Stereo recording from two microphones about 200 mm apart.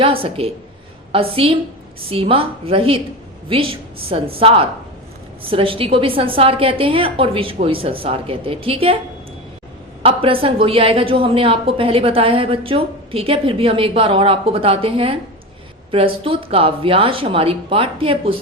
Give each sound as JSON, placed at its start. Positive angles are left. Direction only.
{"t": 0.0, "sound": "a woman's voice", "side_deg": -25}
{"t": 4.1, "sound": "a woman's voice", "side_deg": -30}
{"t": 10.0, "sound": "a woman's voice", "side_deg": -25}